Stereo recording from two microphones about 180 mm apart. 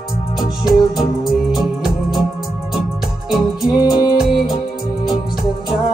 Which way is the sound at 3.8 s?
25° left (ahead or behind).